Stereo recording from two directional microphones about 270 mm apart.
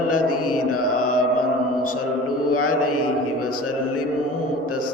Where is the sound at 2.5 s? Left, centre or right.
Left.